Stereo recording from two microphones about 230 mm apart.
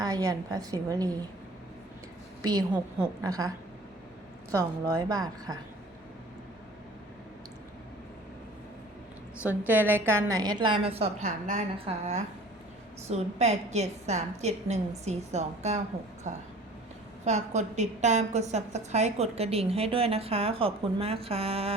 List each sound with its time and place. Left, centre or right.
0.0 s a woman's voice: centre
2.4 s a woman's voice: centre
4.5 s a woman's voice: centre
9.4 s a woman's voice: centre; by 21.8 s right